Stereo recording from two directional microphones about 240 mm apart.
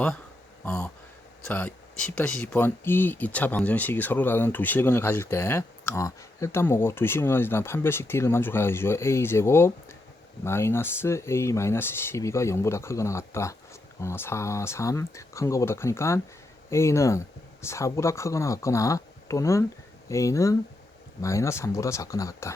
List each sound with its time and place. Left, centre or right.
0.6 s speech: centre